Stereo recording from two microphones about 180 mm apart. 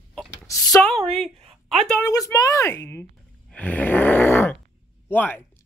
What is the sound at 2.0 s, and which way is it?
Speech, 20° left (ahead or behind).